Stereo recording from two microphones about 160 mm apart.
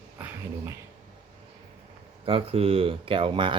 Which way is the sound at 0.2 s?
15° right (ahead or behind).